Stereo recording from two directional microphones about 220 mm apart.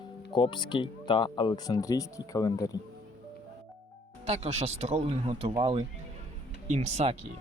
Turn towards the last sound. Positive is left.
turn(degrees=-30)  # may be behind; listen again after turning